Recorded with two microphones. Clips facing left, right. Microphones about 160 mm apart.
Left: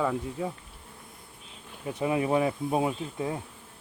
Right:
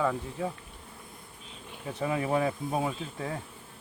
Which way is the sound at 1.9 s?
15° left (ahead or behind).